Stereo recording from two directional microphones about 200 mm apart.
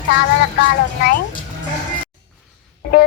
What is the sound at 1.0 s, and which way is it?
Child singing, 45° left (ahead or behind).